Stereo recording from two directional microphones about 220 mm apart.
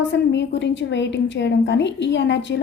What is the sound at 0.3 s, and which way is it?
A woman's voice, 55° left (ahead or behind).